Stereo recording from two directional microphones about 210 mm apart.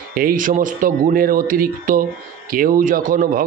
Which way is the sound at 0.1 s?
40° right (ahead or behind).